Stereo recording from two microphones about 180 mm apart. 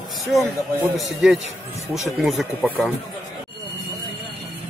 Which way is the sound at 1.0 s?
Centre (ahead or behind).